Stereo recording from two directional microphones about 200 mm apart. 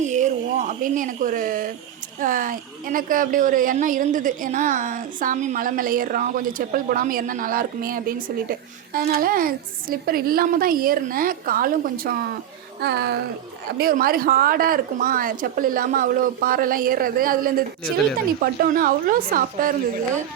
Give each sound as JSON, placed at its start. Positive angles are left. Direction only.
{"t": 0.0, "sound": "a woman's voice", "side_deg": -35}
{"t": 18.6, "sound": "a woman's voice", "side_deg": -45}